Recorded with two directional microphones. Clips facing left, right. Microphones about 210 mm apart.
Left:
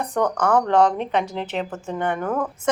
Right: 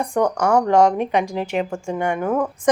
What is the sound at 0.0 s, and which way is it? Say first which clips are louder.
Speech: right 2 dB; 10° right (ahead or behind).